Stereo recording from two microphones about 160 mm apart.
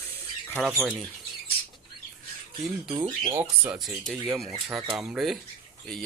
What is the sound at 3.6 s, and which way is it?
Speech, 5° right (ahead or behind).